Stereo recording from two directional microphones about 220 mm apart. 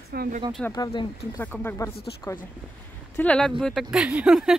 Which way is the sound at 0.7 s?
15° left (ahead or behind).